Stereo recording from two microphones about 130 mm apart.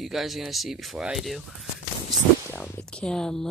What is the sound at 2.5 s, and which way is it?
Speech, 10° left (ahead or behind).